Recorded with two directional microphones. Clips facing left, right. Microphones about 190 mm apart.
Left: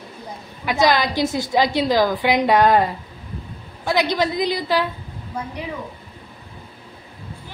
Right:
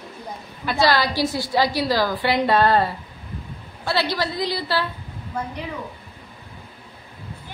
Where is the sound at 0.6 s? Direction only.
20° left (ahead or behind).